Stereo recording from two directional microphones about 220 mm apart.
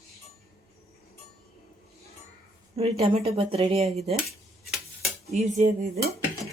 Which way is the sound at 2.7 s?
25° right (ahead or behind).